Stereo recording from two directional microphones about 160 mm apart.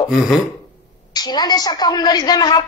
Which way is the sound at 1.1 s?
25° left (ahead or behind).